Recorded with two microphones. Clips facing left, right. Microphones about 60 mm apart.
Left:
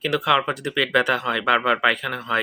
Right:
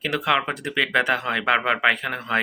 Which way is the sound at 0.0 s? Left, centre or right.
Right.